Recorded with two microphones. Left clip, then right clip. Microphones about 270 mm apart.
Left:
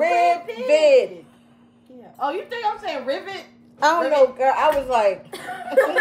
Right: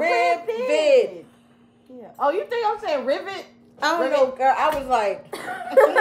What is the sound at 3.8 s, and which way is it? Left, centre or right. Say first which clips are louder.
A woman's voice: left 3 dB; centre.